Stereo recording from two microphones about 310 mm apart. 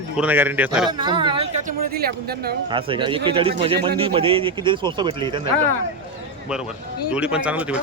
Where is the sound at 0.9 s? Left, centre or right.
Centre.